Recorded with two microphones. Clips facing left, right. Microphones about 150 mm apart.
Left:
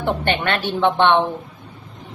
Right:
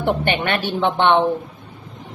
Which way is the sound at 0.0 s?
15° right (ahead or behind).